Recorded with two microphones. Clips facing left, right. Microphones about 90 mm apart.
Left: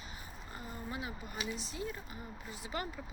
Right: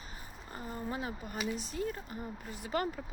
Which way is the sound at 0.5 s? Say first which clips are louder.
Right 5 dB; 40° right (ahead or behind).